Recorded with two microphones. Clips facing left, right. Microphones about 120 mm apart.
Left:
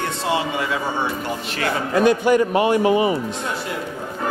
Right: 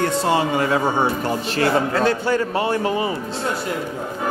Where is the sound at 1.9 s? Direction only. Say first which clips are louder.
Left 3 dB; 15° left (ahead or behind).